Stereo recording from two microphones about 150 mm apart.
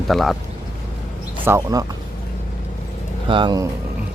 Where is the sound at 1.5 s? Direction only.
20° right (ahead or behind).